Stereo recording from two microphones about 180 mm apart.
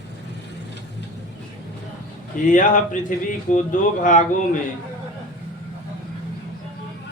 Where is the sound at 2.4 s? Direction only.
45° left (ahead or behind).